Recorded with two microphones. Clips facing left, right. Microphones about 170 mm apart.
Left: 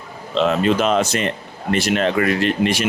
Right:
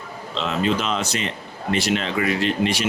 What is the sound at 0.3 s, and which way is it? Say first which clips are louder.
Speech: left 6 dB; 50° left (ahead or behind).